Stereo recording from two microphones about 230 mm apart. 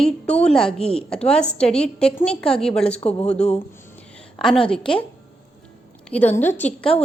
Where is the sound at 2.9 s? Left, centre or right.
Left.